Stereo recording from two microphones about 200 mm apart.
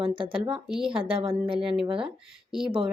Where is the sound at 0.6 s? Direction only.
5° right (ahead or behind).